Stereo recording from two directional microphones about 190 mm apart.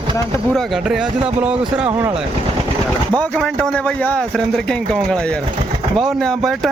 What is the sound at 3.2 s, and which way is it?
Speech, 5° left (ahead or behind).